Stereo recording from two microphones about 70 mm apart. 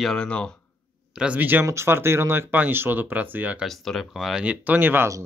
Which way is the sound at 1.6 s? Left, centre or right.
Right.